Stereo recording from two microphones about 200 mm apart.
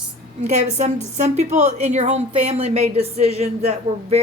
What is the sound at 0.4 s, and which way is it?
A woman's voice, 35° right (ahead or behind).